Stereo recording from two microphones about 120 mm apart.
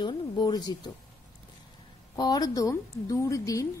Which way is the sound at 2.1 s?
35° left (ahead or behind).